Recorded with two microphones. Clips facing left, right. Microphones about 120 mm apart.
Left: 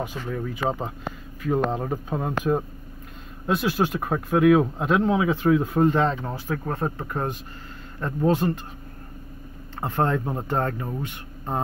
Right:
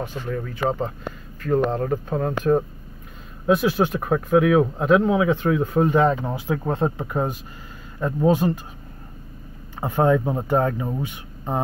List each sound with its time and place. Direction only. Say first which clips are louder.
0.0 s speech: right 1 dB; 10° left (ahead or behind); by 6.3 s 10° right (ahead or behind)
6.3 s speech: right 4 dB; 20° right (ahead or behind)
7.1 s speech: right 4 dB; 10° right (ahead or behind)
9.8 s speech: right 5 dB; 10° right (ahead or behind)